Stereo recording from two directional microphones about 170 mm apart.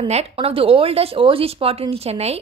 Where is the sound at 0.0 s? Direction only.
35° right (ahead or behind).